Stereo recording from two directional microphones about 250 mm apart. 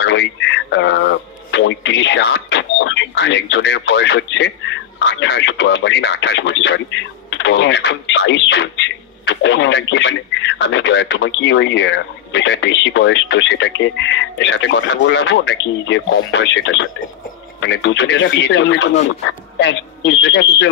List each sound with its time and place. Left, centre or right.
0.0 s speech: left